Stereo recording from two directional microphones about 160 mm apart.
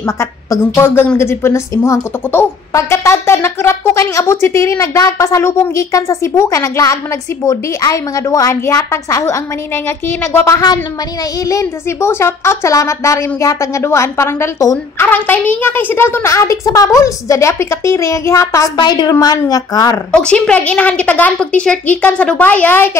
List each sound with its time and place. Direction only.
0.0 s a woman's voice: 15° left (ahead or behind)
20.1 s a woman's voice: 5° left (ahead or behind)